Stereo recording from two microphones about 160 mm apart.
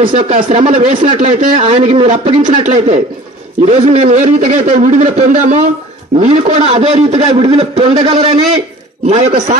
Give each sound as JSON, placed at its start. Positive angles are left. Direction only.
{"t": 0.1, "sound": "a man's voice", "side_deg": -50}